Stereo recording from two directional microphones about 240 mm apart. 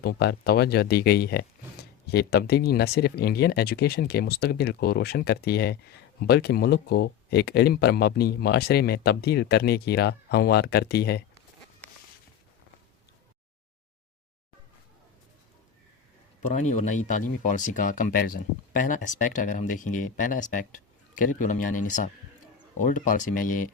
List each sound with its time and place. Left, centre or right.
0.0 s speech: left
16.5 s speech: left